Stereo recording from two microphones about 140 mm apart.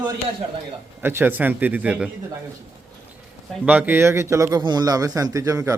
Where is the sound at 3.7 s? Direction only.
10° right (ahead or behind).